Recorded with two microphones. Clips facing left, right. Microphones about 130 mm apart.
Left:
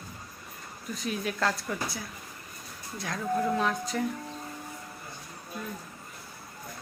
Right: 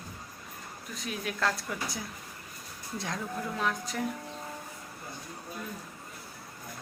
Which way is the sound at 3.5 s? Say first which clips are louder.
Left 4 dB; centre (ahead or behind).